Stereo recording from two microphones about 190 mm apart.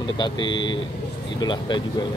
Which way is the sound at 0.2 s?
25° left (ahead or behind).